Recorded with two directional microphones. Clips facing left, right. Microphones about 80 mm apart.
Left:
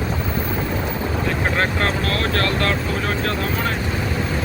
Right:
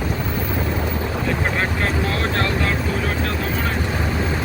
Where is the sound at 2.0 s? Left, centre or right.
Centre.